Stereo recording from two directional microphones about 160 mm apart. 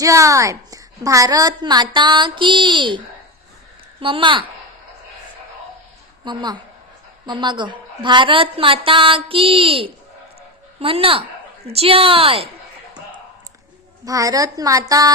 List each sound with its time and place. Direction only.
0.0 s a woman's voice: 20° right (ahead or behind)
4.0 s a woman's voice: 30° right (ahead or behind)
6.2 s a woman's voice: 25° right (ahead or behind)
14.0 s a woman's voice: 20° right (ahead or behind)